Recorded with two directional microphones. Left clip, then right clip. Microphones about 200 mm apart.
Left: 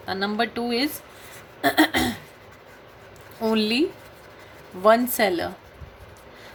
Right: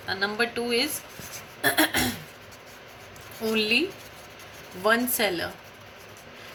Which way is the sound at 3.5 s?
60° left (ahead or behind).